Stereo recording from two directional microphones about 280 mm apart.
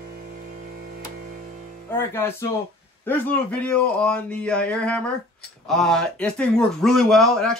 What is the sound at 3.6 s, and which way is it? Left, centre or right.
Speech, centre.